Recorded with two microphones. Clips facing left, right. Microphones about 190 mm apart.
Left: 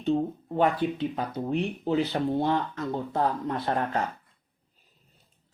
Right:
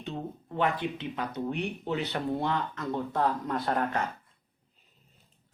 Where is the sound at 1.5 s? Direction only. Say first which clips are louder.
Left 7 dB; 35° left (ahead or behind).